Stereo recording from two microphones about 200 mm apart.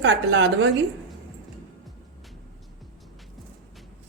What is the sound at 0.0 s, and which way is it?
Speech, 65° right (ahead or behind).